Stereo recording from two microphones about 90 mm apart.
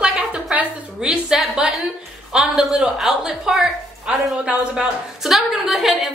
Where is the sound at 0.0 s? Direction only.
5° right (ahead or behind).